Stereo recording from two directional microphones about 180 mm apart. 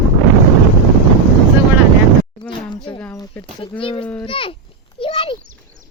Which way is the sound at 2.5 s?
25° left (ahead or behind).